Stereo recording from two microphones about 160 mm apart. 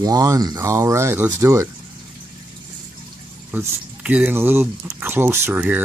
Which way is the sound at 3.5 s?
10° right (ahead or behind).